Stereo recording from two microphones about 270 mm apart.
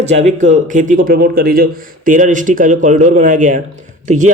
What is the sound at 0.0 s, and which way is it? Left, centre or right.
Speech, right.